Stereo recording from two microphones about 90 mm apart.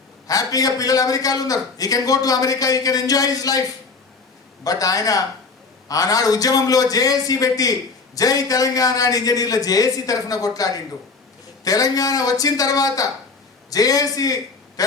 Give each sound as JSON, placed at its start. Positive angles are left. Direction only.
{"t": 0.3, "sound": "a man's voice", "side_deg": 40}